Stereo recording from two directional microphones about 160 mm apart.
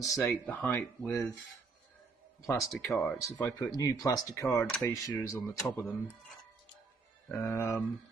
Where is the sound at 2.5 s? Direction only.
Centre (ahead or behind).